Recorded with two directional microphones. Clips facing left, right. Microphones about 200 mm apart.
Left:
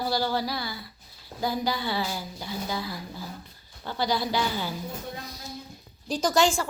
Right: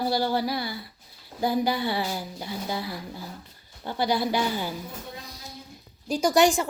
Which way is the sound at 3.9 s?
55° right (ahead or behind).